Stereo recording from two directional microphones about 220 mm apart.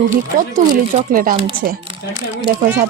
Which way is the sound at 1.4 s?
25° right (ahead or behind).